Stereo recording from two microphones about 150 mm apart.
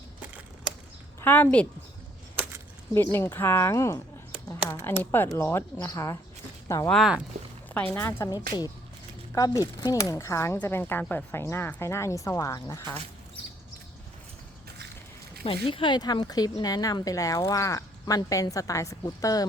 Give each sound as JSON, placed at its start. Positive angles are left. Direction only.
{"t": 1.2, "sound": "a woman's voice", "side_deg": 10}
{"t": 2.9, "sound": "speech", "side_deg": 15}
{"t": 6.9, "sound": "speech", "side_deg": -5}
{"t": 7.7, "sound": "speech", "side_deg": 10}
{"t": 9.3, "sound": "speech", "side_deg": 25}
{"t": 15.6, "sound": "speech", "side_deg": 35}